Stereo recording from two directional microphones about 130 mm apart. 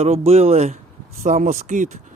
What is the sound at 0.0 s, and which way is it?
Speech, 55° right (ahead or behind).